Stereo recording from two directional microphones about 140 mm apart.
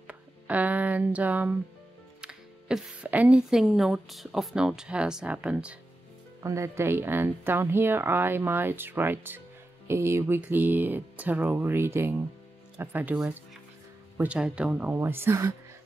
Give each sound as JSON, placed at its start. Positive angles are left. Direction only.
{"t": 0.0, "sound": "a sound", "side_deg": -10}
{"t": 2.2, "sound": "speech", "side_deg": -10}
{"t": 6.4, "sound": "speech", "side_deg": -20}